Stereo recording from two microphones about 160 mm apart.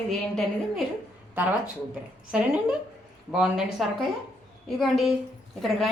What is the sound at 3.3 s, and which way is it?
A woman's voice, 5° right (ahead or behind).